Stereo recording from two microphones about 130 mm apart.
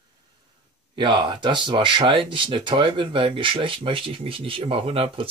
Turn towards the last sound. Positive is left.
turn(degrees=-45)  # may be behind; listen again after turning